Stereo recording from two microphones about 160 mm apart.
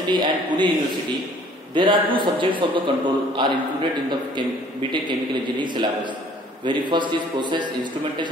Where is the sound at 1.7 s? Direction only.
30° right (ahead or behind).